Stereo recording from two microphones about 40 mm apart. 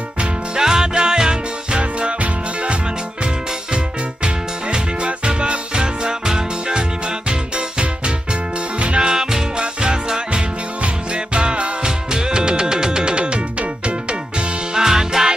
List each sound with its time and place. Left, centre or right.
0.6 s music: centre
3.7 s music: right
9.0 s music: centre
14.7 s music: centre